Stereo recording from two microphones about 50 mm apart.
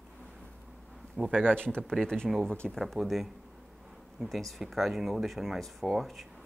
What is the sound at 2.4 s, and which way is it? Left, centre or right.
Speech, left.